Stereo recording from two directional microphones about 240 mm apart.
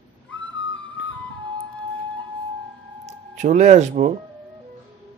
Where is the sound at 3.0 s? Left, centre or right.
Right.